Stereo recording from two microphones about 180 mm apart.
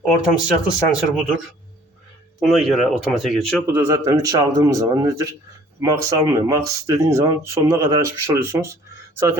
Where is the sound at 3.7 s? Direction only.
15° right (ahead or behind).